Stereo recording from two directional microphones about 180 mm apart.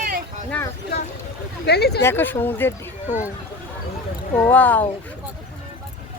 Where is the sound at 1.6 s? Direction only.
65° left (ahead or behind).